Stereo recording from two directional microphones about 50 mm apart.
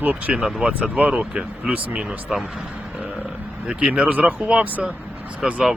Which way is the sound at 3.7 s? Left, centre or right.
Centre.